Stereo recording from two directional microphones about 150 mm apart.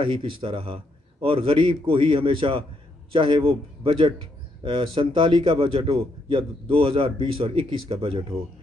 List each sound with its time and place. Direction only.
0.0 s a man's voice: 35° right (ahead or behind)